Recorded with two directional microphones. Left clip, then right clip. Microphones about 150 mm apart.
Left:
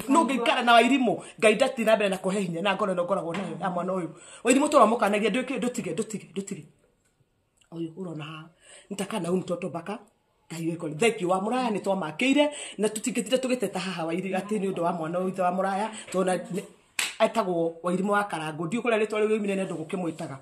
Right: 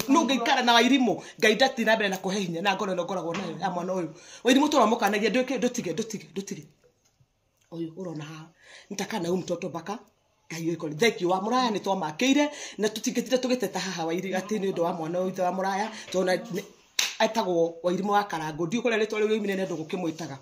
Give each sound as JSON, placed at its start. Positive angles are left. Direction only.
{"t": 0.1, "sound": "speech", "side_deg": 15}
{"t": 8.9, "sound": "speech", "side_deg": 15}